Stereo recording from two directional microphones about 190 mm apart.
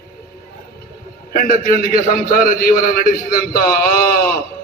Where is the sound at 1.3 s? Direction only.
50° left (ahead or behind).